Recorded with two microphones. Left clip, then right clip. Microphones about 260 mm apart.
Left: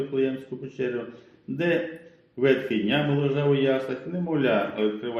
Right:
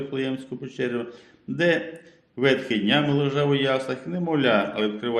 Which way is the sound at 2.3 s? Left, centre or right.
Right.